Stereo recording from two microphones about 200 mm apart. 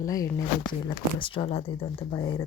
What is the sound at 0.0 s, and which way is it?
Speech, 15° left (ahead or behind).